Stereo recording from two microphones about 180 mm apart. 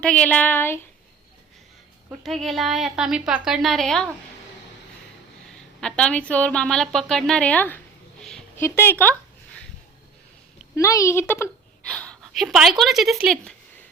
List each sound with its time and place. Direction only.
0.0 s speech: 5° left (ahead or behind)
2.2 s a woman's voice: centre (ahead or behind)
5.8 s a woman's voice: 5° left (ahead or behind)
10.8 s a woman's voice: 15° left (ahead or behind); by 13.5 s centre (ahead or behind)